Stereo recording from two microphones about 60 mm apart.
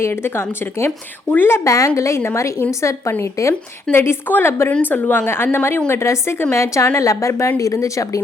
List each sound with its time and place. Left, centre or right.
0.0 s a woman's voice: left
0.9 s speech: left
1.6 s a woman's voice: left
2.0 s a woman's voice: left
3.4 s a woman's voice: left
3.9 s a woman's voice: left